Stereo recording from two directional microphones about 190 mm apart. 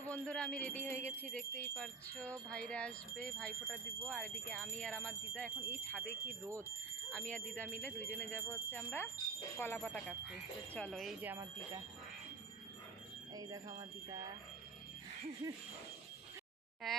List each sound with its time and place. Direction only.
0.0 s speech: 5° left (ahead or behind); by 11.8 s 10° right (ahead or behind)
13.3 s speech: 20° right (ahead or behind)
16.8 s speech: centre (ahead or behind)